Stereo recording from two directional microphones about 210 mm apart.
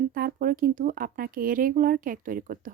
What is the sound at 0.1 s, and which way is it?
Speech, 45° right (ahead or behind).